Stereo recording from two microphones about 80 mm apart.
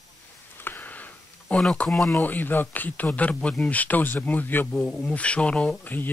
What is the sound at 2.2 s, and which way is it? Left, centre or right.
Speech, left.